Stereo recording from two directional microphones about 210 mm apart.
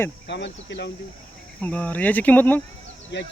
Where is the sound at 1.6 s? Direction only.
5° left (ahead or behind).